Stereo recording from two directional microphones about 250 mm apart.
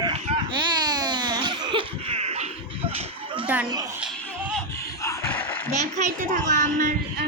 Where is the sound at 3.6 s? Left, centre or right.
Centre.